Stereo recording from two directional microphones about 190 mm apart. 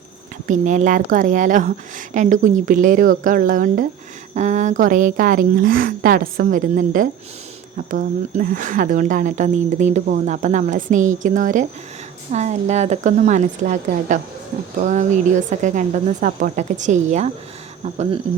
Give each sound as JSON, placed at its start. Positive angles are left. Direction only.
{"t": 0.4, "sound": "speech", "side_deg": -40}